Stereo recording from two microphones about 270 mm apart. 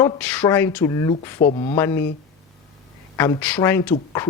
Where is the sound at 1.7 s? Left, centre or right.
Centre.